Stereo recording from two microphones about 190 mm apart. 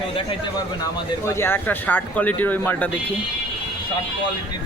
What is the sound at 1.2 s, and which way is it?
Speech, 15° left (ahead or behind).